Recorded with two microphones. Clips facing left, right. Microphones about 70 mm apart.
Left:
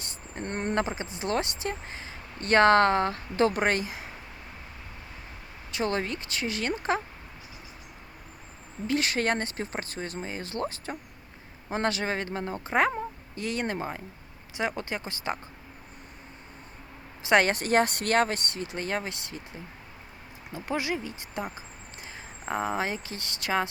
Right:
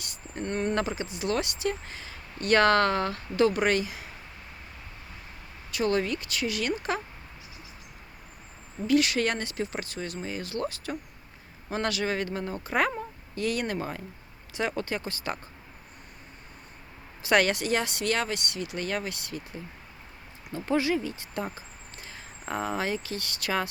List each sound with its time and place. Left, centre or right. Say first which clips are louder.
0.0 s speech: right 2 dB; left
5.7 s speech: right 3 dB; left
8.9 s speech: right 2 dB; left
17.2 s speech: left 1 dB; left
20.5 s speech: right 4 dB; centre